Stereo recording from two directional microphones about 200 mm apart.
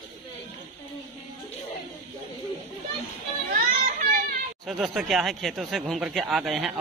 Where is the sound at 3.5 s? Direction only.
45° right (ahead or behind).